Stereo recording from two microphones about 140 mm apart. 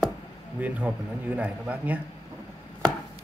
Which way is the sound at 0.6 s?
10° right (ahead or behind).